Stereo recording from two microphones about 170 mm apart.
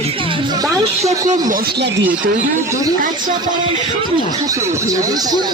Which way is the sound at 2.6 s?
20° right (ahead or behind).